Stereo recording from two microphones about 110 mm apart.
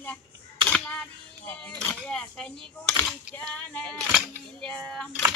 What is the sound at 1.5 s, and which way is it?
Speech, 10° left (ahead or behind).